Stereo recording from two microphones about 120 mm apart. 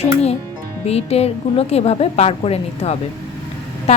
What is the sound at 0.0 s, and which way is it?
Music, 60° left (ahead or behind).